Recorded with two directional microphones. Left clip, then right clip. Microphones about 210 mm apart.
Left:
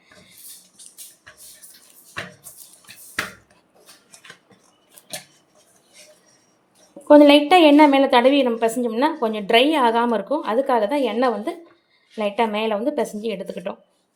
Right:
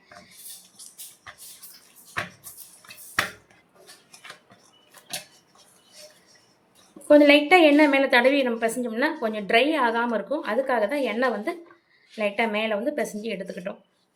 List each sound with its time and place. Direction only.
7.1 s a woman's voice: 25° left (ahead or behind)